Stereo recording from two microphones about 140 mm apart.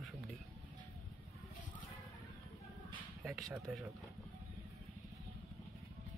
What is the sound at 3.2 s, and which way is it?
Speech, centre (ahead or behind).